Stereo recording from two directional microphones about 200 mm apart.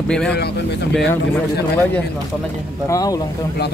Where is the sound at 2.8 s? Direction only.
15° left (ahead or behind).